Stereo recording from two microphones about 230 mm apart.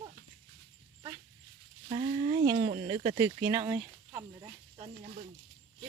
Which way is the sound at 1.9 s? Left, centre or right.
Right.